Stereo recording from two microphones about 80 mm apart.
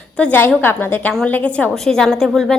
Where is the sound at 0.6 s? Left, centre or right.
Left.